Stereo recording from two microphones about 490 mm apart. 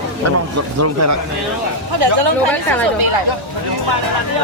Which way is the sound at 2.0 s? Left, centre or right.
Right.